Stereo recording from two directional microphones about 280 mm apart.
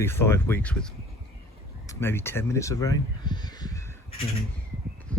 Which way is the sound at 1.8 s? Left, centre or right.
Centre.